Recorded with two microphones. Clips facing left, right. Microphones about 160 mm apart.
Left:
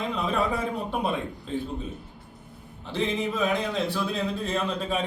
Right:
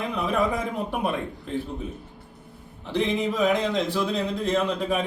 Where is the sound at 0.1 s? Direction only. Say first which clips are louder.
Right 3 dB; 15° right (ahead or behind).